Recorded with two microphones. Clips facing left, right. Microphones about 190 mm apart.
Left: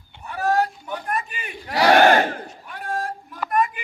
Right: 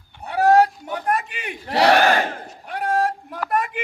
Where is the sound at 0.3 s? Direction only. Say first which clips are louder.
Right 6 dB; 80° right.